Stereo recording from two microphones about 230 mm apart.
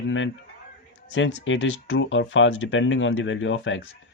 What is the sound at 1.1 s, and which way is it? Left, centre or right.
Speech, left.